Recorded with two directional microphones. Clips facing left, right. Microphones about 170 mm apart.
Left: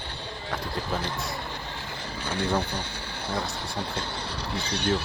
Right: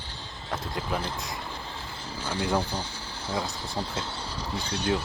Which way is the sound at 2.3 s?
65° left (ahead or behind).